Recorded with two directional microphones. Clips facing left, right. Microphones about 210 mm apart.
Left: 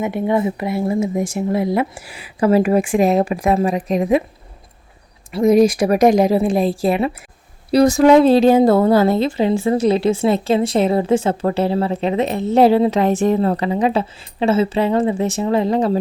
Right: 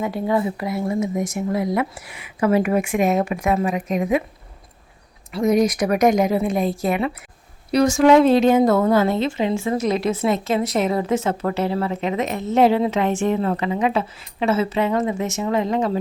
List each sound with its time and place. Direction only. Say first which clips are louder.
0.0 s a woman's voice: left 3 dB; 20° left (ahead or behind)
5.3 s a woman's voice: left 5 dB; 25° left (ahead or behind)